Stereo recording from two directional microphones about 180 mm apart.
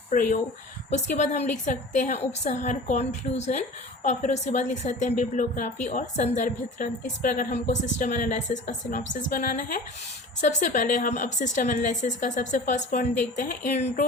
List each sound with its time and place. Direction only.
0.1 s a woman's voice: 45° left (ahead or behind)